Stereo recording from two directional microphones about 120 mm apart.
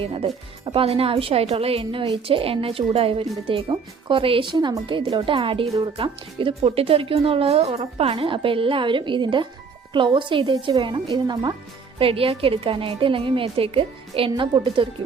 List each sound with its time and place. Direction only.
0.0 s speech: 50° right (ahead or behind)
11.9 s speech: 50° right (ahead or behind)